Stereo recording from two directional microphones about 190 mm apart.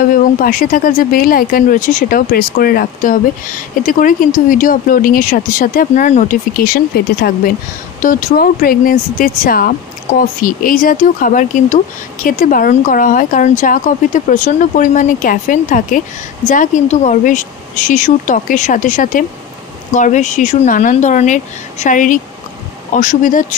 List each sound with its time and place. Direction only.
0.1 s speech: 45° left (ahead or behind)
8.0 s speech: 45° left (ahead or behind)